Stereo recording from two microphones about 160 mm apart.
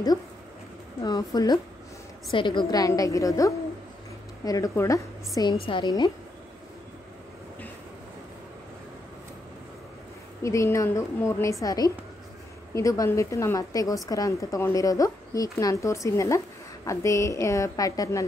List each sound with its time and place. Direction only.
1.0 s a woman's voice: 25° left (ahead or behind)
10.4 s a woman's voice: 20° left (ahead or behind)